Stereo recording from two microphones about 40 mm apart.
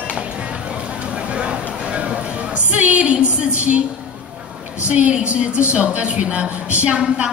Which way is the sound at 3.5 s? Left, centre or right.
Right.